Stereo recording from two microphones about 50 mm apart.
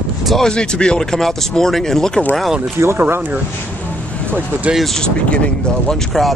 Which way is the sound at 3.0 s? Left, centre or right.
Right.